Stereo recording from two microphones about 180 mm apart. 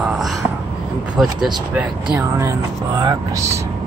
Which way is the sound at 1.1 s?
5° right (ahead or behind).